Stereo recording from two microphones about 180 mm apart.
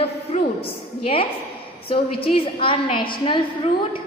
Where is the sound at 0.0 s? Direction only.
35° left (ahead or behind).